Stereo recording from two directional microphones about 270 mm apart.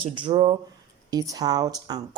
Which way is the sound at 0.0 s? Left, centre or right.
Centre.